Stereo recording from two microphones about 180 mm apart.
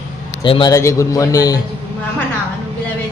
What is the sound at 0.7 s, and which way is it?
Speech, 15° left (ahead or behind).